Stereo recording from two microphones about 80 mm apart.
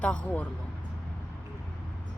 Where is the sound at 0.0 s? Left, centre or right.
Centre.